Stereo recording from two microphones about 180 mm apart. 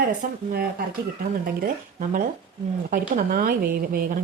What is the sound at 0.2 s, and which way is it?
Speech, 55° right (ahead or behind).